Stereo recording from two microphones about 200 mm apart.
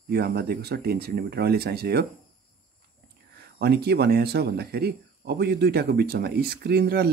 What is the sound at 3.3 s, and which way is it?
Speech, 55° right (ahead or behind).